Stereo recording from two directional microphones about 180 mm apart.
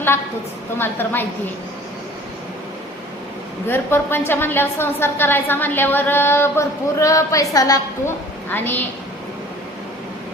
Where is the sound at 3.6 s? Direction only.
10° left (ahead or behind).